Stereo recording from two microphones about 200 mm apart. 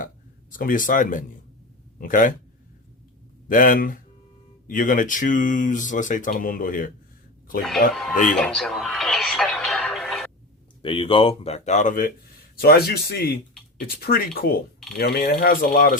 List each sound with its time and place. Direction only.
0.6 s speech: 45° left (ahead or behind)
3.5 s speech: 45° left (ahead or behind)
8.1 s speech: 40° left (ahead or behind)
8.4 s music: 5° left (ahead or behind)
10.8 s speech: 25° left (ahead or behind); by 16.0 s 45° left (ahead or behind)